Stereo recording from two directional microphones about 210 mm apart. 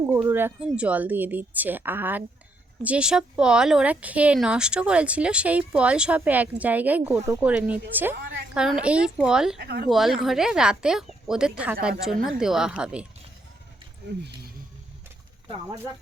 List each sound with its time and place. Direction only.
0.1 s a woman's voice: 10° right (ahead or behind)
9.6 s speech: 50° right (ahead or behind)
9.9 s speech: centre (ahead or behind)
14.2 s speech: 50° right (ahead or behind)
15.5 s a woman's voice: 15° right (ahead or behind)